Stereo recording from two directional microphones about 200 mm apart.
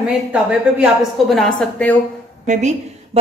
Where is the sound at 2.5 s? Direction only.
35° right (ahead or behind).